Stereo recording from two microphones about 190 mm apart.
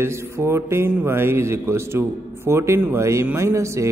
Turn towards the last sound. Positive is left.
turn(degrees=-15)  # may be behind; listen again after turning